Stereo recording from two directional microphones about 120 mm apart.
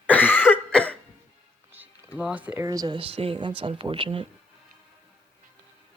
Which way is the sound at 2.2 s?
10° right (ahead or behind).